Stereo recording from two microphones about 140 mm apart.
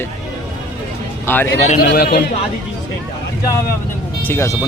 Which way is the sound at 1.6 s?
75° left (ahead or behind).